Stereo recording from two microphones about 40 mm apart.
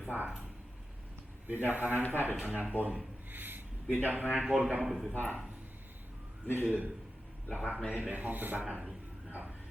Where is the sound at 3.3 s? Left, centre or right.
Right.